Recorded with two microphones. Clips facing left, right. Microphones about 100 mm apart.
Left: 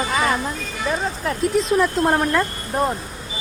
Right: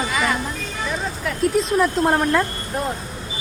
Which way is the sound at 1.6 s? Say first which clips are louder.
Left 1 dB; centre (ahead or behind).